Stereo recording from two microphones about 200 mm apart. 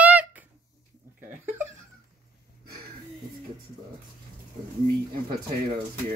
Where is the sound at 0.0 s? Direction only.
5° right (ahead or behind).